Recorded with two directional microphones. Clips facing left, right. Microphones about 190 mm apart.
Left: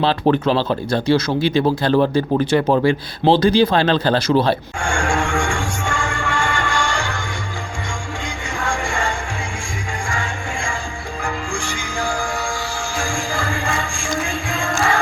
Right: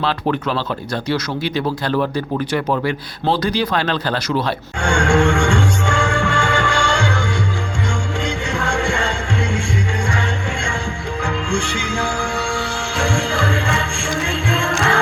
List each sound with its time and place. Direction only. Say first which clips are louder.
0.0 s speech: left 4 dB; 30° left (ahead or behind)
4.8 s music: right 5 dB; 65° right (ahead or behind)
8.5 s music: right 1 dB; 65° right (ahead or behind)